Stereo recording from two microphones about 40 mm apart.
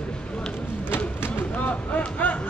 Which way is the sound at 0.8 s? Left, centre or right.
Left.